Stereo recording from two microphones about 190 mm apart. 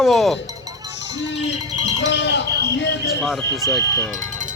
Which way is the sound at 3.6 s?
15° left (ahead or behind).